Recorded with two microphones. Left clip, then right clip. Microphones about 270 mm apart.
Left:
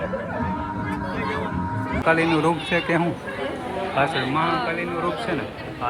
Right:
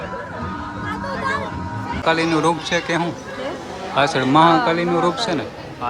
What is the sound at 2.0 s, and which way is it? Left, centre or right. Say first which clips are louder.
A man's voice: right 2 dB; centre.